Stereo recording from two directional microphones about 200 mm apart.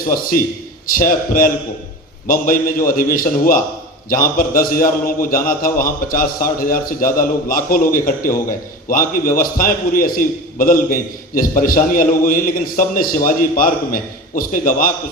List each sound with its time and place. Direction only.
0.1 s a man's voice: 45° left (ahead or behind)